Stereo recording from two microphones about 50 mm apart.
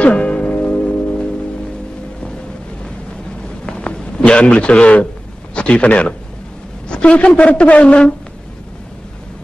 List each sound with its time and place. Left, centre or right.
0.0 s music: centre
3.6 s a sound: centre
5.5 s a man's voice: left